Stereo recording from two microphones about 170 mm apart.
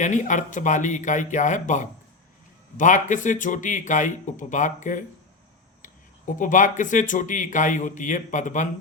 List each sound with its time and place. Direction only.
0.0 s speech: 45° left (ahead or behind)